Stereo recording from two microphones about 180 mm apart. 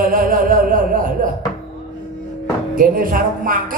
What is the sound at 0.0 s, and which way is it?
Music, 50° right (ahead or behind).